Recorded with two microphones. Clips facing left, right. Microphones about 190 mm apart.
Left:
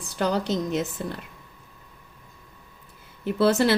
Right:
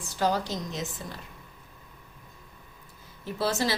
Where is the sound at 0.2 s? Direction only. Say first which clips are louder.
Left 3 dB; 65° left (ahead or behind).